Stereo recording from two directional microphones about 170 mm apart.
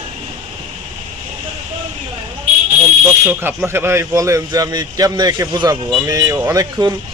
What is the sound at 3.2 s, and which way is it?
A man's voice, 10° right (ahead or behind).